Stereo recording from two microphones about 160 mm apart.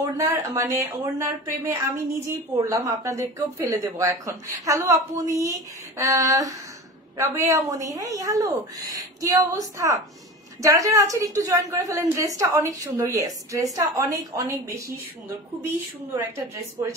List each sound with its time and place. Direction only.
0.0 s speech: 20° right (ahead or behind)